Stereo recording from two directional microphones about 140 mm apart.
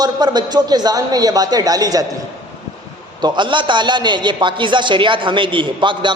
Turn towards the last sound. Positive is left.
turn(degrees=-35)  # may be behind; listen again after turning